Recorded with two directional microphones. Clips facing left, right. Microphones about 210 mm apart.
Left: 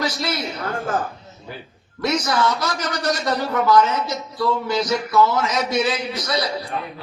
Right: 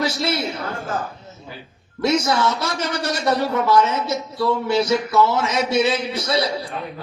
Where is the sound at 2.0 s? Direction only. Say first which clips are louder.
Right 2 dB; 25° right (ahead or behind).